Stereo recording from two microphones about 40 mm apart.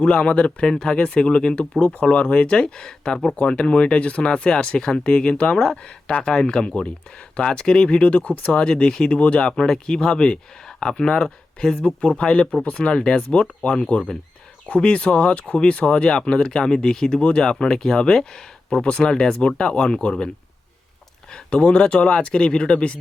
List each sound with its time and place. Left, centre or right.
0.0 s speech: left; by 1.0 s centre
1.0 s speech: left
6.2 s speech: left
8.5 s speech: left
9.1 s speech: left
9.4 s speech: centre
12.6 s speech: left
12.9 s speech: left
21.3 s speech: left